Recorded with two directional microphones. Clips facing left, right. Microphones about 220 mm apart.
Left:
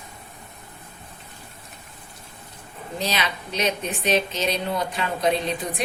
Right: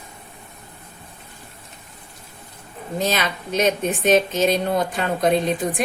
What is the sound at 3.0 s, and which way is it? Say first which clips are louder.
A woman's voice: right 4 dB; 50° right (ahead or behind).